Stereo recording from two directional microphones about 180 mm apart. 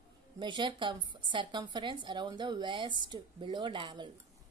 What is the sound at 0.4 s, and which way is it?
A woman's voice, 25° right (ahead or behind).